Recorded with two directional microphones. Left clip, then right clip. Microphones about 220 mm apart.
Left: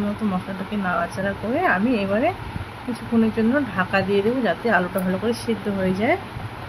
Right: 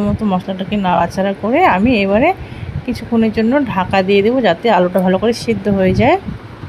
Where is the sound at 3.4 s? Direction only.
30° right (ahead or behind).